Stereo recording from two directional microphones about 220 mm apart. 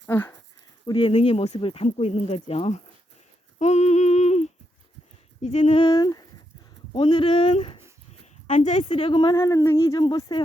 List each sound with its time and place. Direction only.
0.1 s speech: 10° left (ahead or behind)
0.9 s speech: 25° left (ahead or behind)
3.6 s a sound: 30° left (ahead or behind)
5.4 s speech: 30° left (ahead or behind)